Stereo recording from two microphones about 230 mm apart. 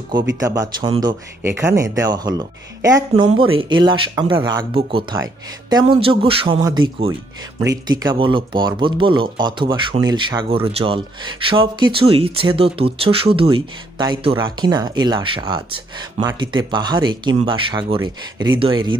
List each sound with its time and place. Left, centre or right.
0.4 s speech: centre